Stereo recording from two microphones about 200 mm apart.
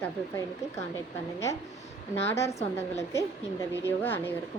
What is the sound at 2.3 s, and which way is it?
Speech, 15° left (ahead or behind).